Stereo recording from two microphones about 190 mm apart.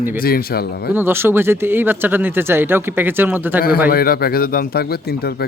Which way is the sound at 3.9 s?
50° left (ahead or behind).